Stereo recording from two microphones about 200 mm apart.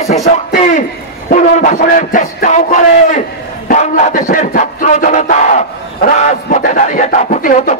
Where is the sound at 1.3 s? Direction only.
40° left (ahead or behind).